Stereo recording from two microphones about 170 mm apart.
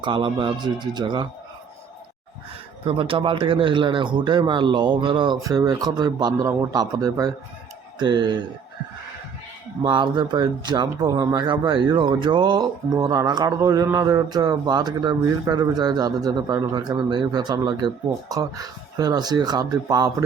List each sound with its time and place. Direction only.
0.0 s speech: 30° right (ahead or behind)
2.8 s speech: 30° right (ahead or behind)
9.8 s speech: 30° right (ahead or behind)